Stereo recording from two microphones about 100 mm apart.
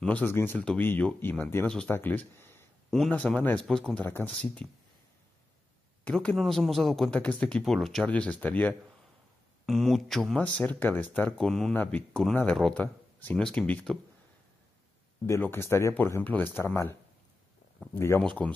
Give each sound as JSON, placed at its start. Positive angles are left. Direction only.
{"t": 0.0, "sound": "speech", "side_deg": 15}
{"t": 0.6, "sound": "speech", "side_deg": 10}
{"t": 3.1, "sound": "speech", "side_deg": 10}
{"t": 3.9, "sound": "speech", "side_deg": 20}
{"t": 6.0, "sound": "speech", "side_deg": 10}
{"t": 6.3, "sound": "a man's voice", "side_deg": 0}
{"t": 8.1, "sound": "speech", "side_deg": 15}
{"t": 9.7, "sound": "a man's voice", "side_deg": 0}
{"t": 10.4, "sound": "speech", "side_deg": 15}
{"t": 11.3, "sound": "a man's voice", "side_deg": 5}
{"t": 11.7, "sound": "speech", "side_deg": 15}
{"t": 15.2, "sound": "speech", "side_deg": 25}
{"t": 17.9, "sound": "speech", "side_deg": 25}